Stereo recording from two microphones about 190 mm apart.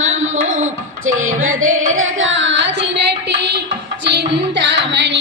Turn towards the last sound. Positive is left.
turn(degrees=-65)  # may be behind; listen again after turning